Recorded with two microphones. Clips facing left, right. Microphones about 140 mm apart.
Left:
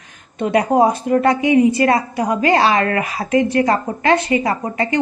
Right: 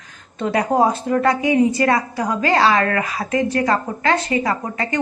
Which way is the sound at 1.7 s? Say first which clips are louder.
Left 3 dB; 25° left (ahead or behind).